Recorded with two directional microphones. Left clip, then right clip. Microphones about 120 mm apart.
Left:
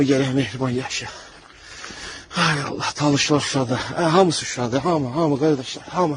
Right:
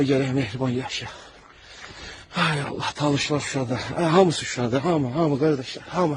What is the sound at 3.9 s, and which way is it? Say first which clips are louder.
Speech: left 2 dB; 35° right (ahead or behind).